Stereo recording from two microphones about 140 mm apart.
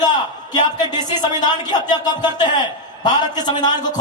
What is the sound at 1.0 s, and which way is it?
A man's voice, 30° left (ahead or behind).